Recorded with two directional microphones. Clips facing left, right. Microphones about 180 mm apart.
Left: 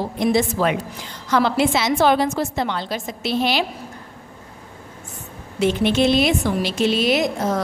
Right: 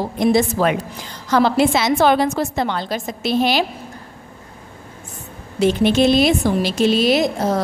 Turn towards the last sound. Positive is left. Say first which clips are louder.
# right 3 dB
turn(degrees=-35)  # may be behind; listen again after turning